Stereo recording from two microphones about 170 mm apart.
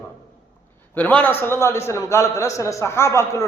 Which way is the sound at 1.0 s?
10° left (ahead or behind).